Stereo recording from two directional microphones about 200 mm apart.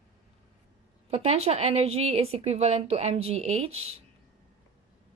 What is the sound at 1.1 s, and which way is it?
A woman's voice, 30° right (ahead or behind).